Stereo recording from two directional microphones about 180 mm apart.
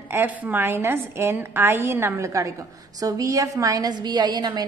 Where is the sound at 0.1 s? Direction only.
10° right (ahead or behind).